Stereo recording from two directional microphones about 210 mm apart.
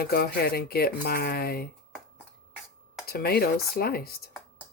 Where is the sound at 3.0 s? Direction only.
50° left (ahead or behind).